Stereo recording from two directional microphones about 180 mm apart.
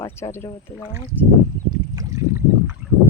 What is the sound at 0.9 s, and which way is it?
Speech, 15° right (ahead or behind).